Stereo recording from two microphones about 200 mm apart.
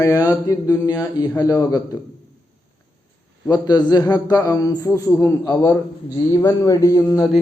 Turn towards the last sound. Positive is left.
turn(degrees=15)  # may be behind; listen again after turning